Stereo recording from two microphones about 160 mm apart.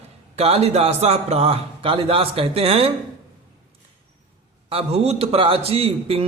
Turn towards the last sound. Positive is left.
turn(degrees=-35)  # may be behind; listen again after turning